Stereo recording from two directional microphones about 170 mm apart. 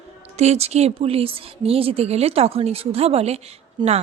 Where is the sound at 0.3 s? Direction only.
40° right (ahead or behind).